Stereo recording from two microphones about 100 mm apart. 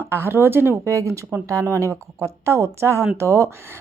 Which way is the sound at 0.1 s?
25° right (ahead or behind).